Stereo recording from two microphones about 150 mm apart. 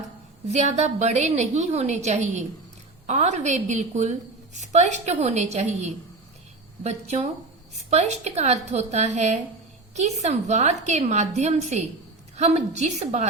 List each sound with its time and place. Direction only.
0.4 s a woman's voice: 50° right (ahead or behind)